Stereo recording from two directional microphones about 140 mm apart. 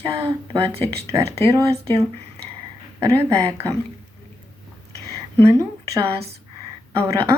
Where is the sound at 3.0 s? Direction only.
20° right (ahead or behind).